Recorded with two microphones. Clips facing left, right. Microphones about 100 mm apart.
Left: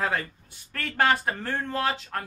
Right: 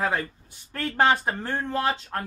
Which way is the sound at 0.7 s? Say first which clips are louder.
Right 2 dB; 25° right (ahead or behind).